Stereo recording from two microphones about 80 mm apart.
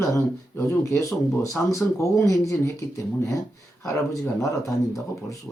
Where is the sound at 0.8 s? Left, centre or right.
Left.